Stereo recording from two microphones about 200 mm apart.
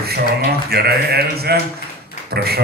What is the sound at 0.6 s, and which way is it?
Speech, 50° right (ahead or behind).